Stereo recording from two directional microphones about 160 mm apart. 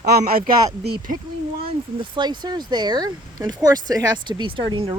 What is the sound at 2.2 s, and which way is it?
Speech, 25° right (ahead or behind).